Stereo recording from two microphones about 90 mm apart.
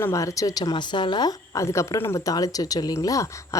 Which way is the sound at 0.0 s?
35° left (ahead or behind).